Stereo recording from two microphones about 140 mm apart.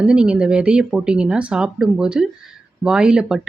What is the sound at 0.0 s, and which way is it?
Speech, 5° right (ahead or behind).